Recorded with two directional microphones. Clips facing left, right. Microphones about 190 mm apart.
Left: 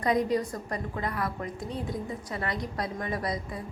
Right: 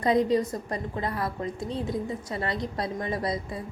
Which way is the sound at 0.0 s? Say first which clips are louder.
Right 3 dB; 25° right (ahead or behind).